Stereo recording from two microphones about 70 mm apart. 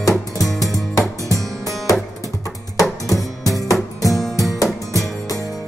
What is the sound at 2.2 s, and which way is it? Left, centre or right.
Music, left.